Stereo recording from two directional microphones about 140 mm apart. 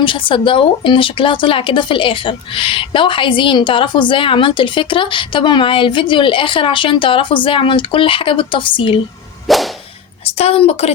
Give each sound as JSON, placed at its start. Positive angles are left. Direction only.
{"t": 0.0, "sound": "speech", "side_deg": 35}
{"t": 9.5, "sound": "whip", "side_deg": 0}
{"t": 10.3, "sound": "a woman's voice", "side_deg": 45}